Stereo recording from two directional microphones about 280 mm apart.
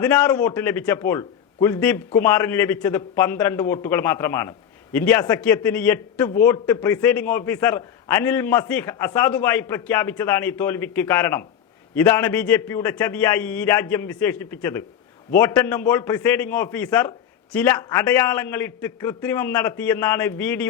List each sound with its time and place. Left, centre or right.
0.0 s a man's voice: centre